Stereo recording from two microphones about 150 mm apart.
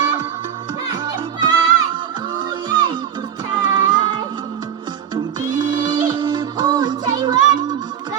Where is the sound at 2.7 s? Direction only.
30° right (ahead or behind).